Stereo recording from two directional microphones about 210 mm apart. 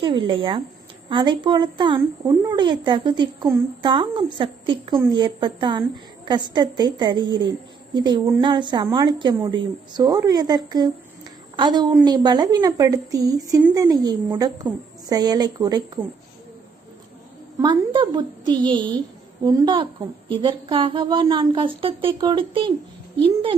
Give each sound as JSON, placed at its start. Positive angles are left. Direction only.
{"t": 0.0, "sound": "a woman's voice", "side_deg": -25}
{"t": 17.6, "sound": "a woman's voice", "side_deg": -20}